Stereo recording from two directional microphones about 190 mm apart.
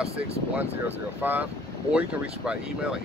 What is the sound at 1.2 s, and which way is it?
Speech, 10° right (ahead or behind).